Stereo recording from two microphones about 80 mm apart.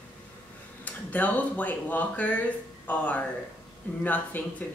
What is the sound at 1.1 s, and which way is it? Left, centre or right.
Speech, left.